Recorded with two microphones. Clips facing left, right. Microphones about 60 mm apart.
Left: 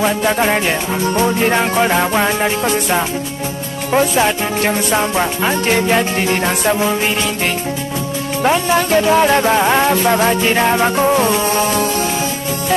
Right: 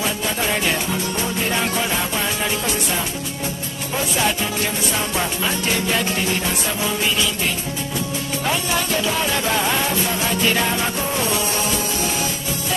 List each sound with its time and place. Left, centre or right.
0.0 s music: left
4.2 s music: left
8.5 s music: left
10.4 s music: left